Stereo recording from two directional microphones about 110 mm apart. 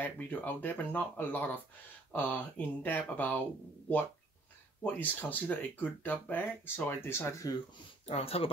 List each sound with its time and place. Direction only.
0.0 s speech: 15° left (ahead or behind)
4.8 s speech: 15° left (ahead or behind)
8.1 s speech: 60° left (ahead or behind)